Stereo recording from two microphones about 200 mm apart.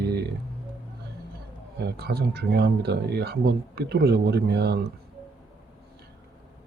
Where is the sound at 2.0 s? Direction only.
55° right (ahead or behind).